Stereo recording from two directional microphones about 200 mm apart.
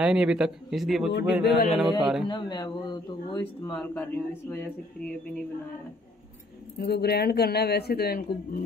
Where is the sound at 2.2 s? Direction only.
20° left (ahead or behind).